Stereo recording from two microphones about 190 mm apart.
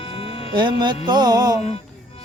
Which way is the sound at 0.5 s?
25° right (ahead or behind).